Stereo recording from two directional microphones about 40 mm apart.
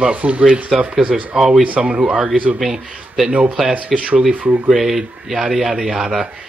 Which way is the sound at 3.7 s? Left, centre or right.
Right.